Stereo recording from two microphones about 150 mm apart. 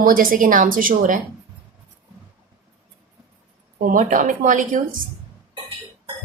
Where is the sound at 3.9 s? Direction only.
60° right (ahead or behind).